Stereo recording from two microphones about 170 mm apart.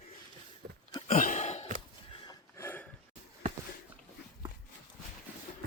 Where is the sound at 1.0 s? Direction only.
45° left (ahead or behind).